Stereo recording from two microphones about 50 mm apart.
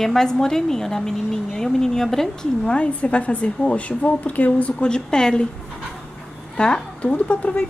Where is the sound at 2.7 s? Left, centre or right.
Left.